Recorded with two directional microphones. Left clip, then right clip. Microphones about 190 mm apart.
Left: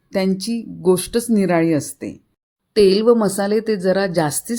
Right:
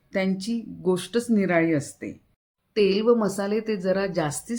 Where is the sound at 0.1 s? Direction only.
35° left (ahead or behind).